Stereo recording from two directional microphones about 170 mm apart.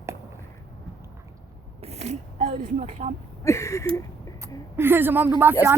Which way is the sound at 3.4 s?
15° left (ahead or behind).